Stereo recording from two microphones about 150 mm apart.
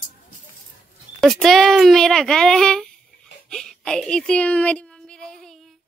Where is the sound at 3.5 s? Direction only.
5° left (ahead or behind).